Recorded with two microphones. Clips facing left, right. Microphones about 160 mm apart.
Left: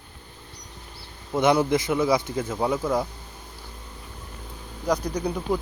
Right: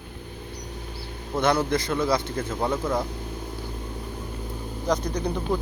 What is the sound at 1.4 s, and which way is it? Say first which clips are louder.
Speech: left 2 dB; 15° left (ahead or behind).